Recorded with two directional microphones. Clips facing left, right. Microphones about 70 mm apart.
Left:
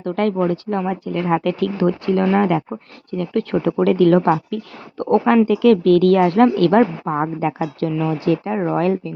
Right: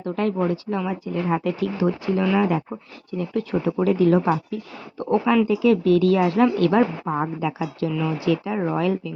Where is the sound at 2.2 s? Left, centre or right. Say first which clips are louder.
Left 3 dB; left.